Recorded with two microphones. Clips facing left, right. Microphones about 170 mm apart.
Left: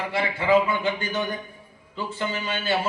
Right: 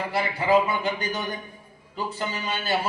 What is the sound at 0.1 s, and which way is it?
A man's voice, 35° right (ahead or behind).